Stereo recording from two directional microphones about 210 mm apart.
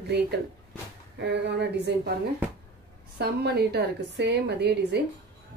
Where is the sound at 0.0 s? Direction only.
50° right (ahead or behind).